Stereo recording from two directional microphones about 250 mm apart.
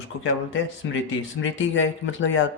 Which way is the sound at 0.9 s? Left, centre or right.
Left.